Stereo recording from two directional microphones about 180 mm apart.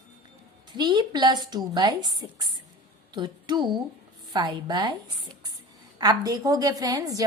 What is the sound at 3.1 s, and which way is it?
A woman's voice, 25° right (ahead or behind).